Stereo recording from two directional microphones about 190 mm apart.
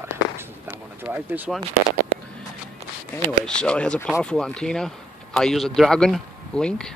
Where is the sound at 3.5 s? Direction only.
5° left (ahead or behind).